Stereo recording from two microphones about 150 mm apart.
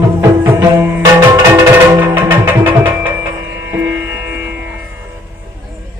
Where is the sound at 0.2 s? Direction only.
20° right (ahead or behind).